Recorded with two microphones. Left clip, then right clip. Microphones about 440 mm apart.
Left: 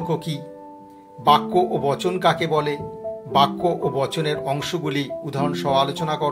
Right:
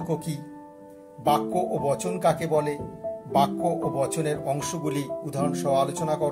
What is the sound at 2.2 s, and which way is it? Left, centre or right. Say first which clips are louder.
Speech: left 3 dB; right.